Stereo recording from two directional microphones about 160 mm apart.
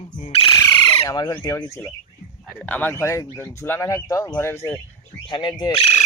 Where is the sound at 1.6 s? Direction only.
10° left (ahead or behind).